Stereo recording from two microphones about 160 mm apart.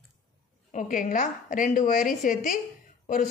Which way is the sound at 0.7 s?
55° left (ahead or behind).